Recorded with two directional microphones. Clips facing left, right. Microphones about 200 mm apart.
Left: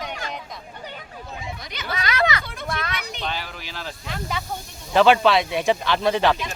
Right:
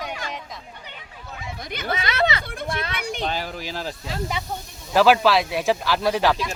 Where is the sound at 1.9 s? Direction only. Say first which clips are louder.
Even; 25° right (ahead or behind).